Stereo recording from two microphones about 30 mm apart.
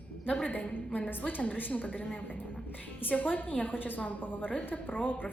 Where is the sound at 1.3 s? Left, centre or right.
Left.